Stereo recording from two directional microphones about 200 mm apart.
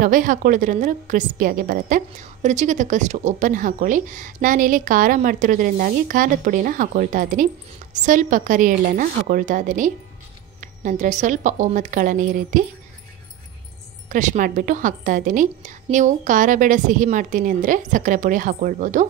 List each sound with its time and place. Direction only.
0.0 s a woman's voice: 40° right (ahead or behind)
14.0 s a woman's voice: 40° right (ahead or behind)